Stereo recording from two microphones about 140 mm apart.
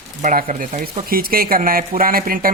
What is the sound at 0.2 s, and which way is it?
Speech, 70° right (ahead or behind).